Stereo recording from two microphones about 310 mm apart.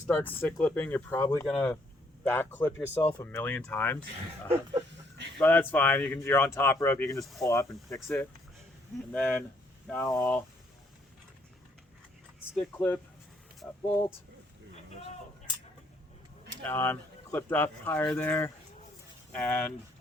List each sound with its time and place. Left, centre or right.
0.1 s speech: centre
4.9 s a sound: right
5.4 s speech: centre
12.5 s speech: centre
16.6 s speech: centre